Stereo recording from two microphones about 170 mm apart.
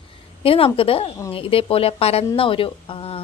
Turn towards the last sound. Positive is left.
turn(degrees=30)  # may be behind; listen again after turning